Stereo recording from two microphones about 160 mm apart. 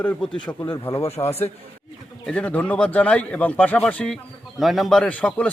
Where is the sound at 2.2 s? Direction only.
10° left (ahead or behind).